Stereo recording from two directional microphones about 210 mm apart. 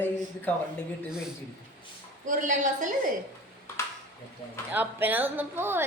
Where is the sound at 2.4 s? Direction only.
35° right (ahead or behind).